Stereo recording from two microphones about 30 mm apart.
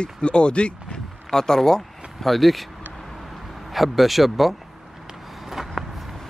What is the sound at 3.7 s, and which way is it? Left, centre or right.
Speech, centre.